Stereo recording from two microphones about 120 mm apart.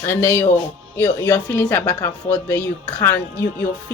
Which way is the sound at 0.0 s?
20° left (ahead or behind).